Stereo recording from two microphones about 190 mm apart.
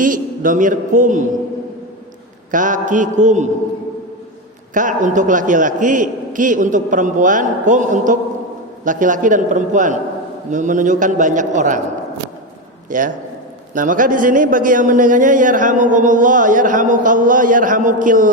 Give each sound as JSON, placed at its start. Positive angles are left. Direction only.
{"t": 0.0, "sound": "a man's voice", "side_deg": -45}
{"t": 2.5, "sound": "a man's voice", "side_deg": -45}
{"t": 4.7, "sound": "a man's voice", "side_deg": -45}
{"t": 12.9, "sound": "a man's voice", "side_deg": -45}